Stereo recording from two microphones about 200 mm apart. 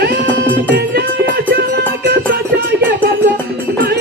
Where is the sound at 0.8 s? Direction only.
50° right (ahead or behind).